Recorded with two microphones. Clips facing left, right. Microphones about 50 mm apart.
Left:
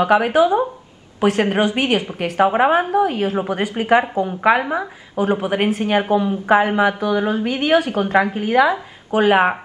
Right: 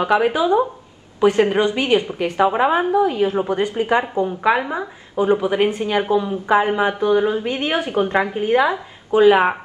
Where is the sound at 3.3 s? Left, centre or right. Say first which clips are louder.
Right 1 dB; left.